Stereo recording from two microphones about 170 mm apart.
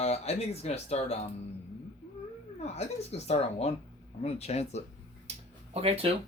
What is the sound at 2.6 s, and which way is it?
Speech, 40° left (ahead or behind).